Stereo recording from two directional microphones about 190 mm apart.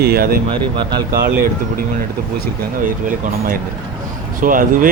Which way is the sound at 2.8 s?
50° right (ahead or behind).